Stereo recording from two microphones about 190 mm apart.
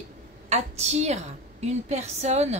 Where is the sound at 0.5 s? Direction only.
35° right (ahead or behind).